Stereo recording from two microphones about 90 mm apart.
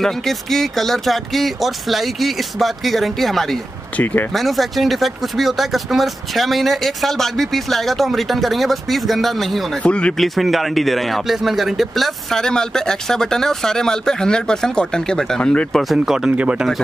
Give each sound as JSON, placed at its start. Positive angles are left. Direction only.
{"t": 0.0, "sound": "speech", "side_deg": 5}
{"t": 4.0, "sound": "speech", "side_deg": 20}
{"t": 4.3, "sound": "speech", "side_deg": 0}
{"t": 9.8, "sound": "speech", "side_deg": 10}
{"t": 10.1, "sound": "speech", "side_deg": 0}
{"t": 16.3, "sound": "speech", "side_deg": -15}